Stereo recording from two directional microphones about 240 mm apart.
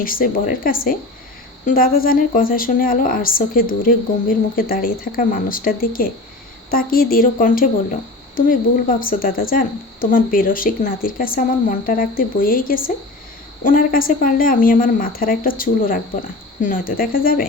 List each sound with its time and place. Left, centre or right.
0.0 s speech: left